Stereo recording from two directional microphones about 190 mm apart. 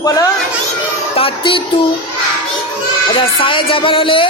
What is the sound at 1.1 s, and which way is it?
Music, 30° left (ahead or behind).